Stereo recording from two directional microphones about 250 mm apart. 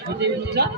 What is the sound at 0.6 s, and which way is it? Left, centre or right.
Speech, right.